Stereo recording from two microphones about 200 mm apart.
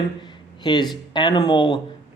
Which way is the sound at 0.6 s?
20° left (ahead or behind).